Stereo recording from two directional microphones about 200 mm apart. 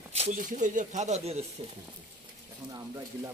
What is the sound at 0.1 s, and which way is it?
Speech, 35° right (ahead or behind).